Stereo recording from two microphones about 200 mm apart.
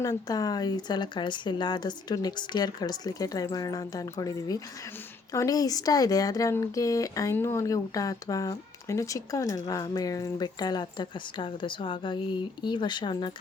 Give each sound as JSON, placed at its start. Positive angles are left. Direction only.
{"t": 0.0, "sound": "speech", "side_deg": 20}